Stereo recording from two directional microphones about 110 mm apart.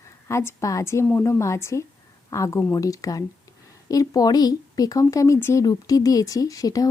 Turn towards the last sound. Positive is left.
turn(degrees=35)  # may be behind; listen again after turning